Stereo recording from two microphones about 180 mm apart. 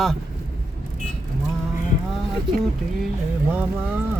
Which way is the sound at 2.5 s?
Centre (ahead or behind).